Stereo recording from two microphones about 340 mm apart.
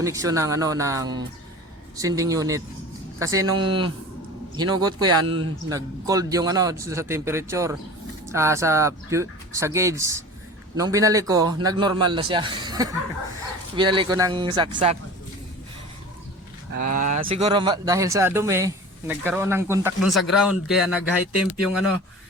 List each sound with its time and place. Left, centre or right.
0.0 s speech: centre
16.7 s speech: right; by 21.8 s centre